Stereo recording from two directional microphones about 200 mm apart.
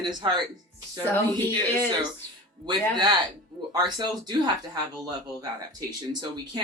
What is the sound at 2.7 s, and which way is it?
Speech, 20° right (ahead or behind).